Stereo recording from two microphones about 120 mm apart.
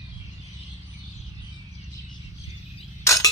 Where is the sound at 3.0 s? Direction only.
25° left (ahead or behind).